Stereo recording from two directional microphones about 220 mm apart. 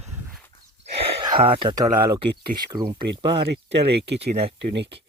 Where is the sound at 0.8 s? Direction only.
20° right (ahead or behind).